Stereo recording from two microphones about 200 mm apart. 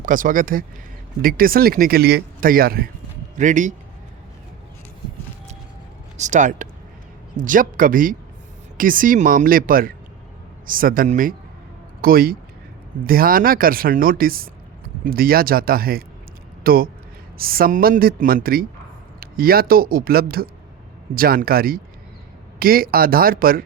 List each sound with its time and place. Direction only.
0.0 s speech: 40° right (ahead or behind)
6.1 s speech: 35° right (ahead or behind)